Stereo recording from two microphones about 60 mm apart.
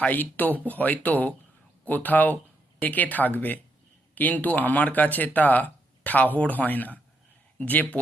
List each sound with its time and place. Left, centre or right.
0.0 s speech: left